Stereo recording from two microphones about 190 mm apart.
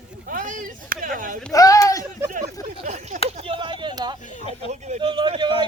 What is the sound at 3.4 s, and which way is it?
Speech, 25° right (ahead or behind).